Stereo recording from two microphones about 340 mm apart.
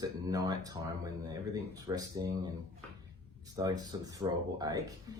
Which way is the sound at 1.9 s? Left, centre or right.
Centre.